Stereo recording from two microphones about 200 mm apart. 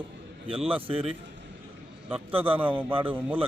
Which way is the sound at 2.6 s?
10° right (ahead or behind).